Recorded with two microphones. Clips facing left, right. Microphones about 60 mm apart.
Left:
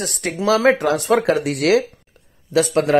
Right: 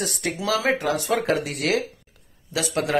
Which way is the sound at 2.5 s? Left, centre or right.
Left.